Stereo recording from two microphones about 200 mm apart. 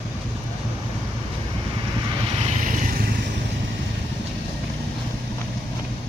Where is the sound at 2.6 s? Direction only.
40° right (ahead or behind).